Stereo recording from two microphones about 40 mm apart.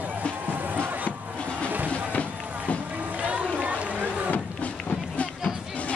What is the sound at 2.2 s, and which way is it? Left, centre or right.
Music, left.